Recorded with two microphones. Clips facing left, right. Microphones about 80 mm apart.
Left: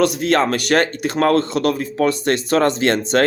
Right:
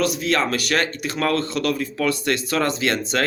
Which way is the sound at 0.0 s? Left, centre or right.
Left.